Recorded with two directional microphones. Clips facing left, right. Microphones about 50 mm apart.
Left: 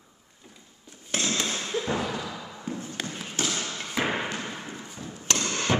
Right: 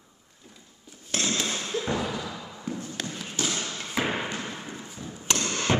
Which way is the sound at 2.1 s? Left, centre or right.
Centre.